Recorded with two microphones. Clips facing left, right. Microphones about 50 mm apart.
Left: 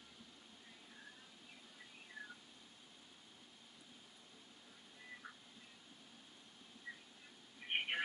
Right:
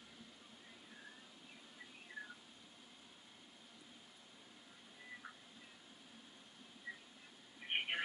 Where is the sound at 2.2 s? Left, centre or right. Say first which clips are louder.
Right 2 dB; centre.